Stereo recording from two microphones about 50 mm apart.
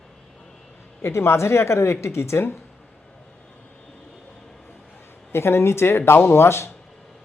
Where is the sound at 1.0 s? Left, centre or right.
Left.